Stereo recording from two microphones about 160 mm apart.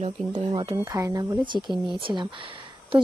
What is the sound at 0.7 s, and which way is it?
Speech, 20° right (ahead or behind).